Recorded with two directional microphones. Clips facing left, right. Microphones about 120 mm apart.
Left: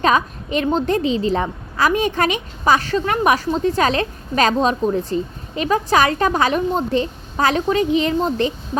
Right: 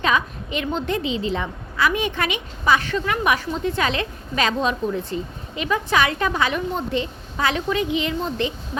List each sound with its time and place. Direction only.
0.0 s a woman's voice: 40° left (ahead or behind)